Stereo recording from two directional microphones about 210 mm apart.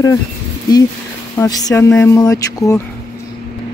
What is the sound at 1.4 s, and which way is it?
Speech, 15° left (ahead or behind).